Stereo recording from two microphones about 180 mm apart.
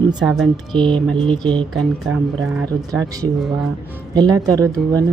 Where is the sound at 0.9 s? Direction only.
5° left (ahead or behind).